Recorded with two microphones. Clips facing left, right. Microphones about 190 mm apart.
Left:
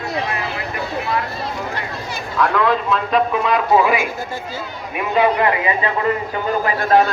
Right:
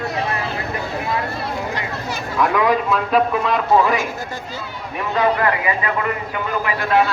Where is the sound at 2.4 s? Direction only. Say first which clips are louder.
Even; 15° right (ahead or behind).